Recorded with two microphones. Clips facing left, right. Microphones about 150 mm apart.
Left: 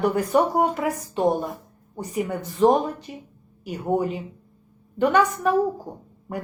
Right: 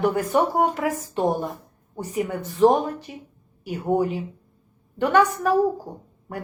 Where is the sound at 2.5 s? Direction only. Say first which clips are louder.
Right 1 dB; 10° right (ahead or behind).